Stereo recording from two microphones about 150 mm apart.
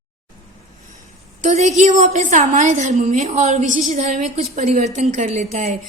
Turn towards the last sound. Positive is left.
turn(degrees=-50)  # may be behind; listen again after turning